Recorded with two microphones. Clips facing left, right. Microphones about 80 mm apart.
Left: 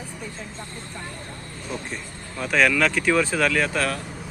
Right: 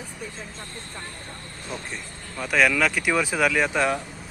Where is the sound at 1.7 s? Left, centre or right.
Centre.